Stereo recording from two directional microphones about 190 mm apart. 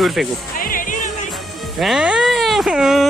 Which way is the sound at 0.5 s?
45° left (ahead or behind).